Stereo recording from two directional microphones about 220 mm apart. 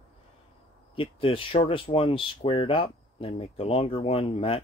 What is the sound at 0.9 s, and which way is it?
Speech, 25° left (ahead or behind).